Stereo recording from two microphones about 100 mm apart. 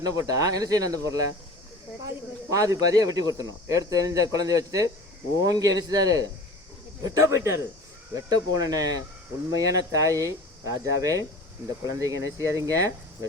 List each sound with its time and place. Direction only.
0.0 s speech: 40° right (ahead or behind)
2.5 s speech: 35° right (ahead or behind)